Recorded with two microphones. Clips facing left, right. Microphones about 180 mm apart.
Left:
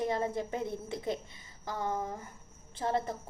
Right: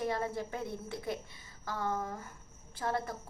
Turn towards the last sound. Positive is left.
turn(degrees=25)  # may be behind; listen again after turning